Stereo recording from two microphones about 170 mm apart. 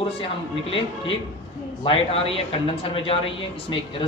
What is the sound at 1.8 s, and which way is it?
A man's voice, 35° left (ahead or behind).